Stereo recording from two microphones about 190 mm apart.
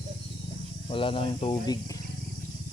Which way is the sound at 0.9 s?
25° left (ahead or behind).